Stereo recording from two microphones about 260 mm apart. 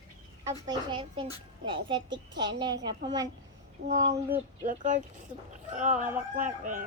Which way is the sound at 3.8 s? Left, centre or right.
Right.